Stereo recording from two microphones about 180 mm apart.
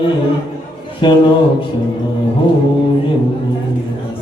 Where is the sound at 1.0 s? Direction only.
25° left (ahead or behind).